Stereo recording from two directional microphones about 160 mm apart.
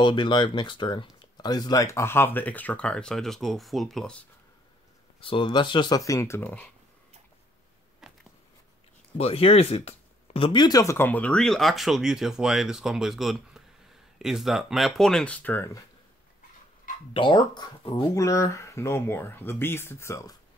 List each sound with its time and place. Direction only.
0.0 s speech: 30° left (ahead or behind); by 4.2 s 5° left (ahead or behind)
5.2 s speech: 30° left (ahead or behind); by 6.7 s 10° left (ahead or behind)
8.0 s a sound: 5° right (ahead or behind)
9.2 s speech: 40° left (ahead or behind); by 15.8 s 15° left (ahead or behind)
17.1 s speech: 30° left (ahead or behind)